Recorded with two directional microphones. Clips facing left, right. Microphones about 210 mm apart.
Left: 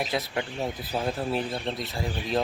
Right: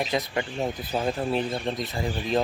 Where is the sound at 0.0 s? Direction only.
Centre (ahead or behind).